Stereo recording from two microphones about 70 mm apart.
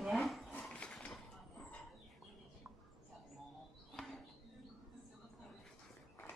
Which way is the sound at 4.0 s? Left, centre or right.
Centre.